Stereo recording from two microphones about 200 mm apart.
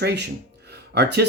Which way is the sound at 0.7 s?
55° right (ahead or behind).